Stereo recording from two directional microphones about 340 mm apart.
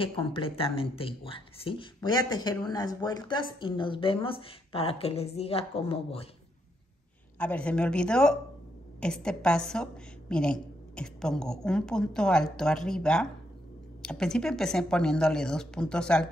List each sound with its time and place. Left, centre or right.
0.0 s speech: centre
7.3 s a woman's voice: centre